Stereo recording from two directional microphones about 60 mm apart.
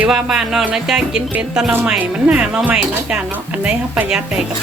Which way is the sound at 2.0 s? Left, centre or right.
Right.